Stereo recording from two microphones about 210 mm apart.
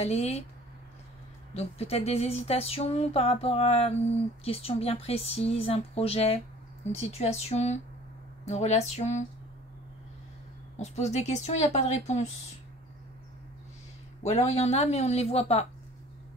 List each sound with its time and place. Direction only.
0.0 s speech: 30° left (ahead or behind)
1.5 s a sound: 30° left (ahead or behind)
7.0 s speech: 30° left (ahead or behind)
10.8 s speech: 30° left (ahead or behind)
14.2 s speech: 30° left (ahead or behind)